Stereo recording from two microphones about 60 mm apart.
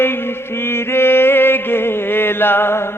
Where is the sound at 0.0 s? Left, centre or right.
Left.